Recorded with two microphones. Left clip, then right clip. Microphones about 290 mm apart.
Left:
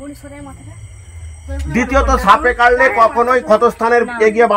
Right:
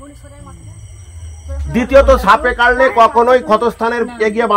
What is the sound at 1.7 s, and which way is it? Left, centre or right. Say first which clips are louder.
A man's voice: right 5 dB; centre.